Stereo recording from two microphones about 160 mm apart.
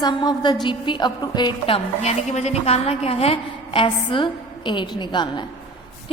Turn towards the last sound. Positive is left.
turn(degrees=30)  # may be behind; listen again after turning